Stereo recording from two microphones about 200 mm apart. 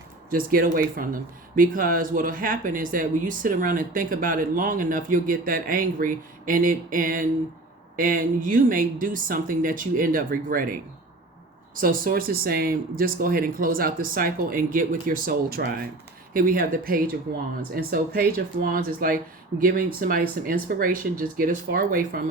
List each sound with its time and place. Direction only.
0.3 s speech: 45° right (ahead or behind)